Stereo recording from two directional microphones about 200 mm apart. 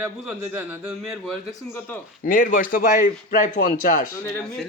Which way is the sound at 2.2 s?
45° left (ahead or behind).